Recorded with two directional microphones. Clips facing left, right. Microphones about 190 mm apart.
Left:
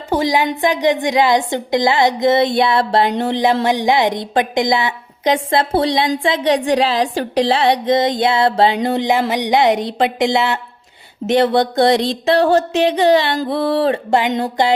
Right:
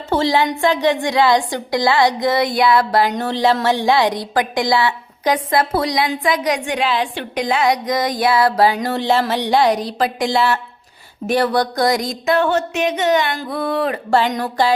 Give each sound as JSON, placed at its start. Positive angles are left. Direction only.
{"t": 0.1, "sound": "music", "side_deg": 15}
{"t": 11.3, "sound": "a sound", "side_deg": 25}
{"t": 14.1, "sound": "music", "side_deg": 20}